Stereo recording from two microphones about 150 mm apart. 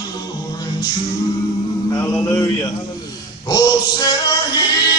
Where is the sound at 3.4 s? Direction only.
25° left (ahead or behind).